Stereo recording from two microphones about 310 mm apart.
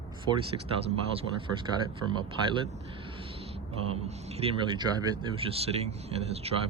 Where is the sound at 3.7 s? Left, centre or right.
Centre.